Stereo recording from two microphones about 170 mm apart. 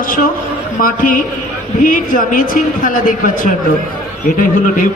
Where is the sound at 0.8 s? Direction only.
55° left (ahead or behind).